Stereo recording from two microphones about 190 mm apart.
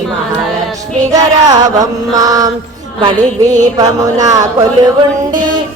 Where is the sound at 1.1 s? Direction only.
20° right (ahead or behind).